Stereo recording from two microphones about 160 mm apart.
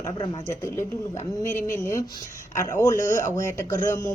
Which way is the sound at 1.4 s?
20° left (ahead or behind).